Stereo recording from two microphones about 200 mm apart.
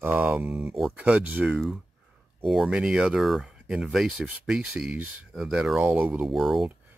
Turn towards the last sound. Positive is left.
turn(degrees=0)  # may be behind; listen again after turning